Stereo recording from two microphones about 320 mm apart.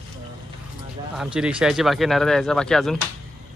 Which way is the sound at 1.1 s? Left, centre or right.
Centre.